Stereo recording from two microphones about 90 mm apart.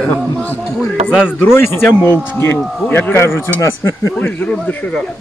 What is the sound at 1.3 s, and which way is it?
Speech, 25° left (ahead or behind).